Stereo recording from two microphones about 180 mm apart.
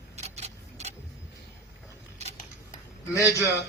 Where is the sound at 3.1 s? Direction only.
15° left (ahead or behind).